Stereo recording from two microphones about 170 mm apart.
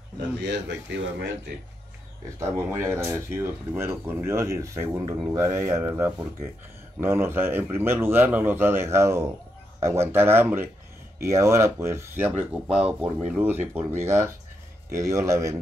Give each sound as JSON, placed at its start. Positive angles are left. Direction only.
{"t": 0.4, "sound": "speech", "side_deg": -90}
{"t": 2.4, "sound": "speech", "side_deg": -15}